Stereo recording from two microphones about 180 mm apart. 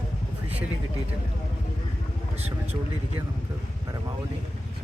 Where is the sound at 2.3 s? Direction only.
35° right (ahead or behind).